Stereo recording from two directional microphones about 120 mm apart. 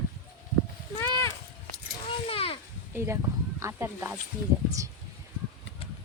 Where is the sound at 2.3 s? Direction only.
55° left (ahead or behind).